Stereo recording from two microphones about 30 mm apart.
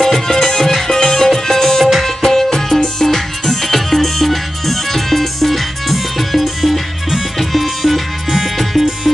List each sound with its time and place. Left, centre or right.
0.0 s music: centre
1.6 s tabla: centre
2.0 s music: centre